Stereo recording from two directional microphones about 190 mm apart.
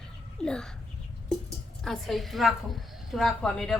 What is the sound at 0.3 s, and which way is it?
Speech, 5° left (ahead or behind).